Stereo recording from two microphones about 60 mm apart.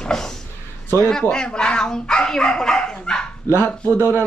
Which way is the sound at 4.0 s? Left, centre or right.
Right.